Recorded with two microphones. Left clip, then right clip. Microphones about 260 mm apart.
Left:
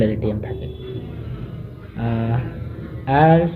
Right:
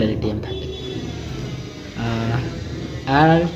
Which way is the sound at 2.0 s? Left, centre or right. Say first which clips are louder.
Even; centre.